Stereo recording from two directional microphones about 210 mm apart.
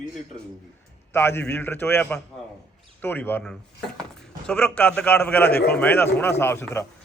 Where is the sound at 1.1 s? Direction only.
10° left (ahead or behind).